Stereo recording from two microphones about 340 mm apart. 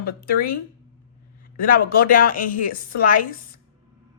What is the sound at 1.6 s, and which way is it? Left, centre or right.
Speech, left.